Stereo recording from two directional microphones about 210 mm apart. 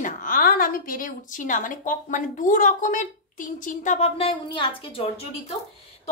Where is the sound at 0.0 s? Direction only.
40° left (ahead or behind); by 5.0 s 25° left (ahead or behind).